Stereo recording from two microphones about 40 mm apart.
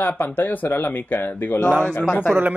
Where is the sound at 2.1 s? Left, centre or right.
Left.